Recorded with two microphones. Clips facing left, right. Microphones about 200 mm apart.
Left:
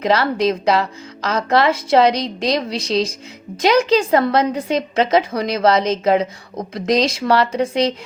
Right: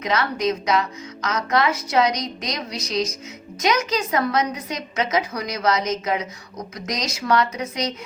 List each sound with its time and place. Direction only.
0.0 s a woman's voice: 30° left (ahead or behind)